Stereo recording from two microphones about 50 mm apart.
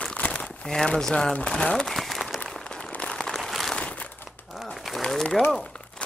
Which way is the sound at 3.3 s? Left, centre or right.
Centre.